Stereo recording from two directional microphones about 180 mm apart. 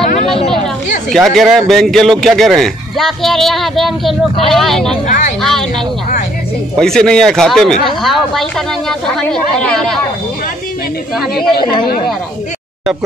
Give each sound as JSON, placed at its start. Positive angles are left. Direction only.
{"t": 0.0, "sound": "a sound", "side_deg": 35}
{"t": 1.1, "sound": "speech", "side_deg": 0}
{"t": 5.0, "sound": "speech", "side_deg": 40}
{"t": 5.4, "sound": "speech", "side_deg": 0}
{"t": 6.8, "sound": "speech", "side_deg": 5}